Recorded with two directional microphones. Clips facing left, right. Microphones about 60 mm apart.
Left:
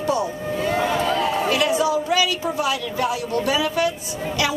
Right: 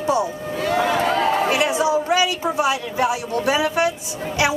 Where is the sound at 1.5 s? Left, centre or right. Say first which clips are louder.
Right 1 dB; right.